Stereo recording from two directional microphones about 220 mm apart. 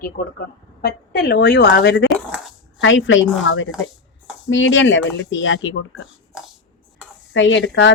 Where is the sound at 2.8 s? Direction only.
60° left (ahead or behind).